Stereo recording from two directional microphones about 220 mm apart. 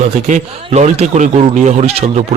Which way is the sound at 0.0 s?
35° right (ahead or behind).